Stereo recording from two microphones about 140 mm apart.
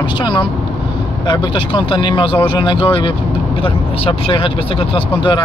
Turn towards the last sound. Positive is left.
turn(degrees=35)  # may be behind; listen again after turning